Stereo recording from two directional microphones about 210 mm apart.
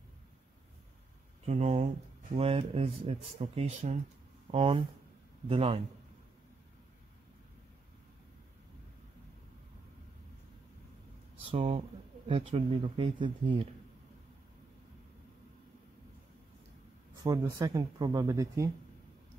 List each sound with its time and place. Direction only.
1.4 s speech: 30° right (ahead or behind)
11.5 s speech: 30° right (ahead or behind)
17.2 s speech: 15° right (ahead or behind)